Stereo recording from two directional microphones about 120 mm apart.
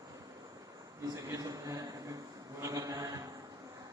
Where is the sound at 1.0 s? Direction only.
30° right (ahead or behind).